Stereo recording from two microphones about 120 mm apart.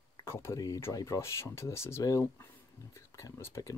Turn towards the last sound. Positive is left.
turn(degrees=20)  # may be behind; listen again after turning